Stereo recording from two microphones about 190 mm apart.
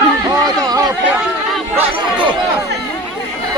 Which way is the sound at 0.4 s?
20° right (ahead or behind).